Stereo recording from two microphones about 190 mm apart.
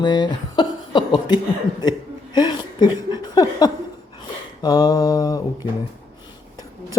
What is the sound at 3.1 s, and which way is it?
Mantra, 20° left (ahead or behind).